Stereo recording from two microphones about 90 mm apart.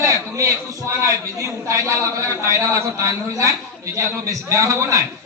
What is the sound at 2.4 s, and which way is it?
A man's voice, 35° right (ahead or behind).